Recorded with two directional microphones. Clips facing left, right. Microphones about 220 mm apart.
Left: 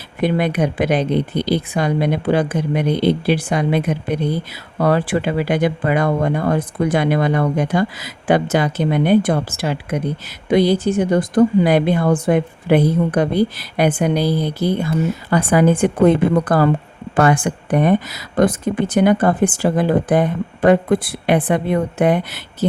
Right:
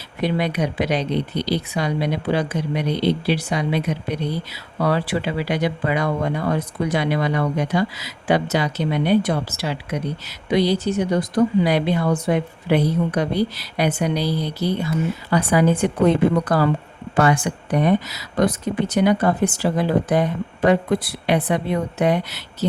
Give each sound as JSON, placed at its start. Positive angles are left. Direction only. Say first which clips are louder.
{"t": 0.2, "sound": "speech", "louder": "left 4 dB", "side_deg": 50}